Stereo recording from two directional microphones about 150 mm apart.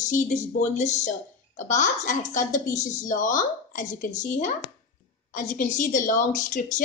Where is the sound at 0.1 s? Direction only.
55° left (ahead or behind).